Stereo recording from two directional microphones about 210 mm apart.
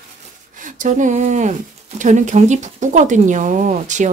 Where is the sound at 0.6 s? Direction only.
40° right (ahead or behind).